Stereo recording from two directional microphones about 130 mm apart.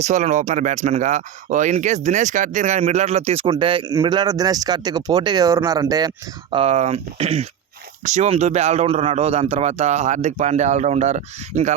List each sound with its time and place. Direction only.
0.0 s speech: 65° right (ahead or behind)
3.4 s speech: 40° right (ahead or behind)
6.6 s speech: 55° right (ahead or behind)
8.0 s speech: 60° right (ahead or behind)